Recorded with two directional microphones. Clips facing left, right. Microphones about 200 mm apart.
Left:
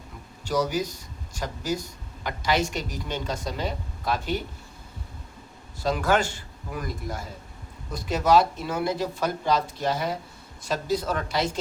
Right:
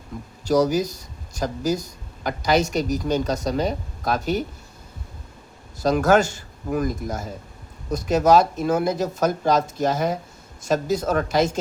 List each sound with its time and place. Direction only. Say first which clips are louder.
0.4 s speech: right 6 dB; 40° right (ahead or behind)
5.8 s speech: right 6 dB; 45° right (ahead or behind)